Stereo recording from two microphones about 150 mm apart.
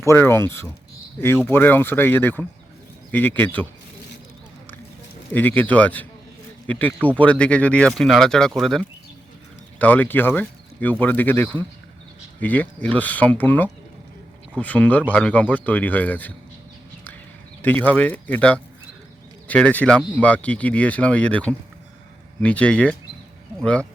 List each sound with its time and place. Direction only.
0.0 s speech: 15° left (ahead or behind)
5.3 s speech: 10° left (ahead or behind)
17.6 s speech: 10° left (ahead or behind)